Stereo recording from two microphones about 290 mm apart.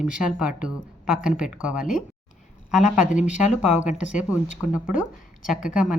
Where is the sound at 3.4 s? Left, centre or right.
Left.